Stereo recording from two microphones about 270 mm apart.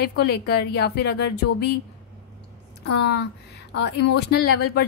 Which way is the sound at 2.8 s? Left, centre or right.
Left.